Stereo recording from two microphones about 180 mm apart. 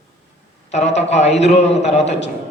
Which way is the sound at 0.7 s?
40° left (ahead or behind).